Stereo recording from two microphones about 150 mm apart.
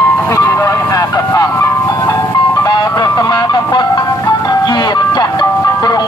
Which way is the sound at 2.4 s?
25° left (ahead or behind).